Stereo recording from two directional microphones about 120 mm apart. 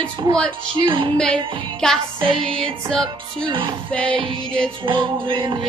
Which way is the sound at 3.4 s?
40° right (ahead or behind).